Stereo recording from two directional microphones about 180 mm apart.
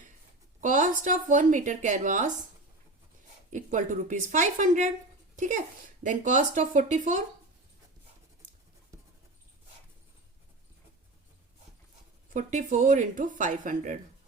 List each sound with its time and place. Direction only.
0.6 s speech: 45° right (ahead or behind)
3.5 s speech: 45° right (ahead or behind)
12.3 s speech: 45° right (ahead or behind)